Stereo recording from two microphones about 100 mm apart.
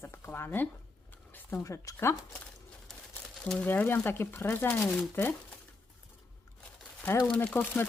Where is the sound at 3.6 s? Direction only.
20° left (ahead or behind).